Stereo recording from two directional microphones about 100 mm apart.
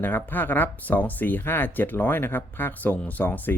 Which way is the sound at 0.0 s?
20° left (ahead or behind).